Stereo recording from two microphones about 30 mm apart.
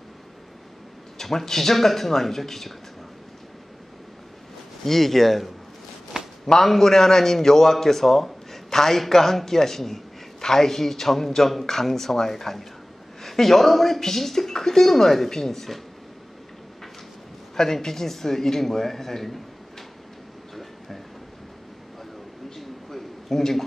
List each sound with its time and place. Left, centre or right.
1.1 s a man's voice: centre
4.8 s a man's voice: centre
6.1 s a sound: centre
6.6 s a man's voice: centre
17.7 s a man's voice: centre
22.8 s a sound: centre